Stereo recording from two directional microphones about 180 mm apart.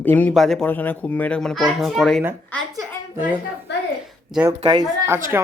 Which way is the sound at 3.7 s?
70° left (ahead or behind).